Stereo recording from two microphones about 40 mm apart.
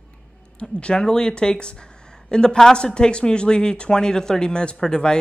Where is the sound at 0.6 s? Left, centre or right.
Left.